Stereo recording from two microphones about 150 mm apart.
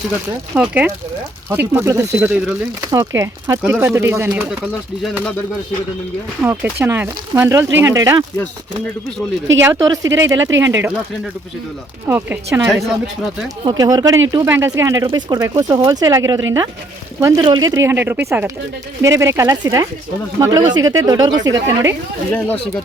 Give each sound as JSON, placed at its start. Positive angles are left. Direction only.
{"t": 0.5, "sound": "speech", "side_deg": -10}
{"t": 2.8, "sound": "speech", "side_deg": -25}
{"t": 6.4, "sound": "speech", "side_deg": -15}
{"t": 9.6, "sound": "speech", "side_deg": -20}
{"t": 12.0, "sound": "speech", "side_deg": -15}
{"t": 12.7, "sound": "speech", "side_deg": 0}
{"t": 13.7, "sound": "speech", "side_deg": -25}
{"t": 22.3, "sound": "speech", "side_deg": 10}